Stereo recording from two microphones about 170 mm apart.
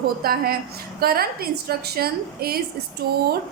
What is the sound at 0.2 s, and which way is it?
A woman's voice, 60° right (ahead or behind).